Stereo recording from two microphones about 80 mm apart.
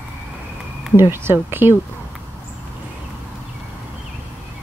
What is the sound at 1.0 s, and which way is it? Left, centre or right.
Speech, right.